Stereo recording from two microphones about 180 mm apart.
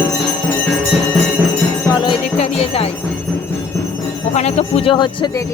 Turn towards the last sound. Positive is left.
turn(degrees=35)  # may be behind; listen again after turning